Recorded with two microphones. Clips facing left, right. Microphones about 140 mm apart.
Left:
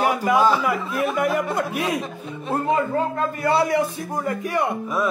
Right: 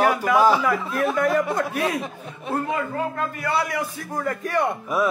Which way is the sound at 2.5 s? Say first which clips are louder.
Left 4 dB; 25° left (ahead or behind).